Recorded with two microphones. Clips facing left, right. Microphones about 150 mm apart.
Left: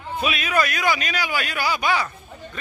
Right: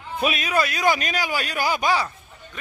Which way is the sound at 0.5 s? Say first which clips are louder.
Left 3 dB; 25° right (ahead or behind).